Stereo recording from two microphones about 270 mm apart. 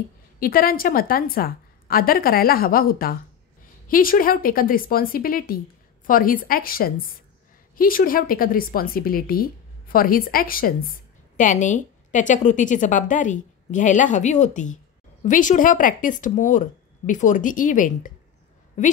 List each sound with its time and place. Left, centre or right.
0.4 s a woman's voice: left